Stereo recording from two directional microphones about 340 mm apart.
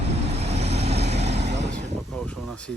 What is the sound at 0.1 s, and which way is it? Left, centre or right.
Vehicle, centre.